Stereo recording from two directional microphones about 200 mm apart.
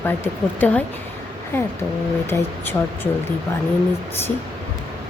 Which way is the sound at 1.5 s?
10° left (ahead or behind).